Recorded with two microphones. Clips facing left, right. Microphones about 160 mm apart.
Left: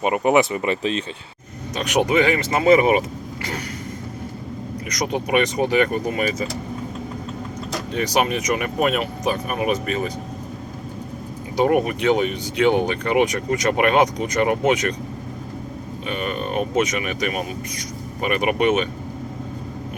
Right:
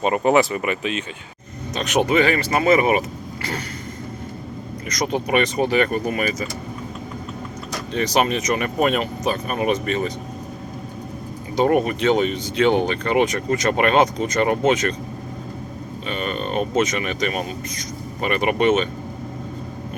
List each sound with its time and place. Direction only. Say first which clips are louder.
0.0 s speech: even; 15° left (ahead or behind); by 1.0 s 35° left (ahead or behind)
1.7 s speech: even; 10° left (ahead or behind)
4.9 s speech: right 1 dB; 15° left (ahead or behind)
7.9 s speech: right 1 dB; 10° left (ahead or behind)
11.5 s speech: even; 10° left (ahead or behind)
16.0 s speech: even; 10° left (ahead or behind)